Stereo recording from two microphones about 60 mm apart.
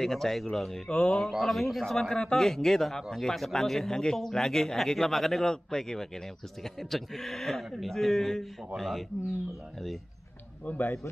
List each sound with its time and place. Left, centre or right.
0.0 s a man's voice: centre
10.6 s speech: left